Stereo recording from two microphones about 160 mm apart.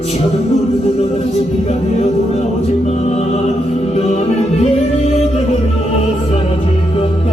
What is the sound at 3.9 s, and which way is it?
Music, 45° left (ahead or behind).